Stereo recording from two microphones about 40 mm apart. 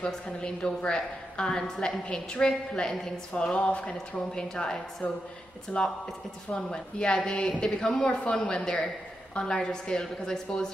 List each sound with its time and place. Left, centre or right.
0.0 s a woman's voice: left
3.5 s speech: left
4.4 s a woman's voice: centre
5.7 s a woman's voice: left